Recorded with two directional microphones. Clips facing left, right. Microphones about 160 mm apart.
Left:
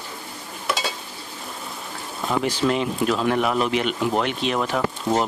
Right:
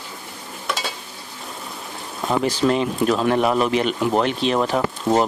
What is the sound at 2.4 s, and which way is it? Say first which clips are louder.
Speech: right 3 dB; 40° right (ahead or behind).